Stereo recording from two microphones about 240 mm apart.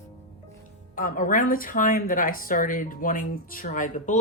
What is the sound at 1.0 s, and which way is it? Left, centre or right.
A woman's voice, left.